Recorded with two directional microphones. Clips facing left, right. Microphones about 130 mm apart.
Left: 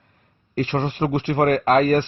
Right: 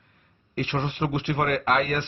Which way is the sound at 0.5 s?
40° left (ahead or behind).